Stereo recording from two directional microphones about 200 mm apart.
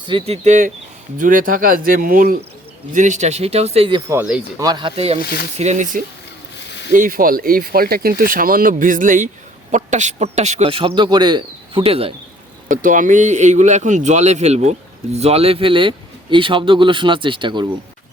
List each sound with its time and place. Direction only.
0.1 s a man's voice: 30° right (ahead or behind)
4.1 s speech: 5° right (ahead or behind)
4.6 s a man's voice: 20° right (ahead or behind)
5.2 s speech: 50° left (ahead or behind)
5.5 s a man's voice: 35° right (ahead or behind)
6.7 s a sound: 60° left (ahead or behind)
6.9 s a man's voice: 45° right (ahead or behind)
12.6 s a man's voice: 40° right (ahead or behind); by 17.7 s 25° right (ahead or behind)